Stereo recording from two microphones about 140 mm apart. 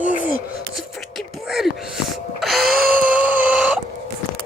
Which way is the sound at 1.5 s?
Centre (ahead or behind).